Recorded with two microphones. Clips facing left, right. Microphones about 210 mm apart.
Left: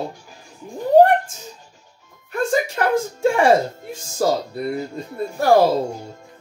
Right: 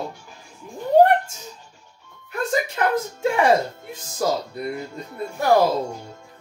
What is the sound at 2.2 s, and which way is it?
Music, 45° left (ahead or behind).